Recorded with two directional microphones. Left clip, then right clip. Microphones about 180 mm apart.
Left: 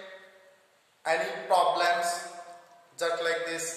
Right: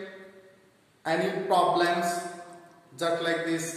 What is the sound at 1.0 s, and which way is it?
Speech, 25° left (ahead or behind).